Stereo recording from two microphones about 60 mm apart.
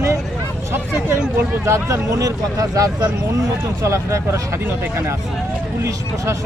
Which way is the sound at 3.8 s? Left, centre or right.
Right.